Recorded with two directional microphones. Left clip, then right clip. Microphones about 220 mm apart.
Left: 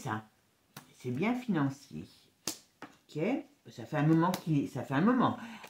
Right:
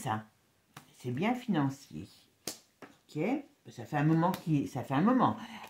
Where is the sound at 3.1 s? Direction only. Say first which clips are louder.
Even; 35° right (ahead or behind).